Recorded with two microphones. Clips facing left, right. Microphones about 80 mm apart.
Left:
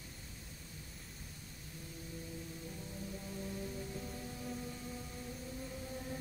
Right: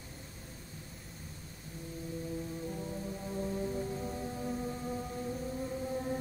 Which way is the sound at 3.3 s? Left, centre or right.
Right.